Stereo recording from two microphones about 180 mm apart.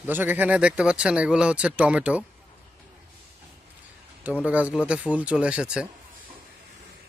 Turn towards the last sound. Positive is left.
turn(degrees=-5)  # may be behind; listen again after turning